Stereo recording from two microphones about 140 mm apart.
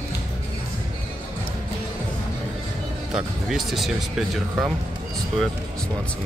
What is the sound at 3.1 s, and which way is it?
Speech, centre (ahead or behind).